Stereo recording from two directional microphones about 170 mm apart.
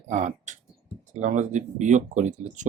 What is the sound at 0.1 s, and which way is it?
Speech, 45° right (ahead or behind).